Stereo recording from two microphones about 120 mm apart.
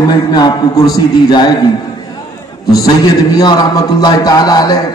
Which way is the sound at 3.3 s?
35° left (ahead or behind).